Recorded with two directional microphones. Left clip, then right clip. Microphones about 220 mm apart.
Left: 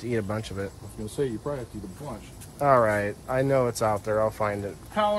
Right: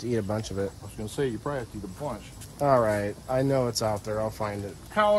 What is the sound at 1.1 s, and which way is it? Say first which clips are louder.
Speech: even; 25° right (ahead or behind).